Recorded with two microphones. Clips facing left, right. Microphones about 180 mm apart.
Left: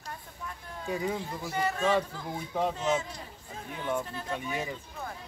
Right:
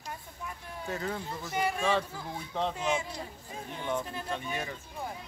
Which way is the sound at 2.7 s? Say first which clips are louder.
Left 2 dB; 10° right (ahead or behind).